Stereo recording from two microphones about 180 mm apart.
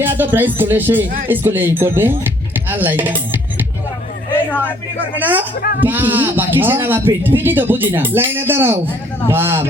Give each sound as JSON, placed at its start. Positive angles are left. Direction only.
{"t": 0.0, "sound": "speech", "side_deg": -10}
{"t": 5.2, "sound": "speech", "side_deg": -10}